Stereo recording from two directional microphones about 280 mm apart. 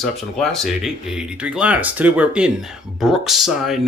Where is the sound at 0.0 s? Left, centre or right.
Centre.